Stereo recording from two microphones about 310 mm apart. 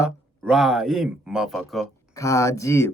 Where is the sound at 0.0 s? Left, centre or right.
Centre.